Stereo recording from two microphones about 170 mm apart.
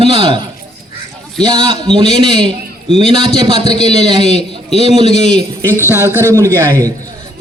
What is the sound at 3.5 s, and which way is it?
A man's voice, 40° left (ahead or behind).